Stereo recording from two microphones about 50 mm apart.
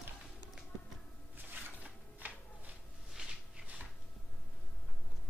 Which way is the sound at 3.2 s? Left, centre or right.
Centre.